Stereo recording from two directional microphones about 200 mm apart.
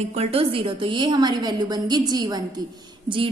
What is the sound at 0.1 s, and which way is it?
A woman's voice, 30° right (ahead or behind).